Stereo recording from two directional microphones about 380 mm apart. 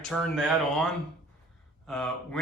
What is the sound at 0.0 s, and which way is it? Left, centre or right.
A man's voice, centre.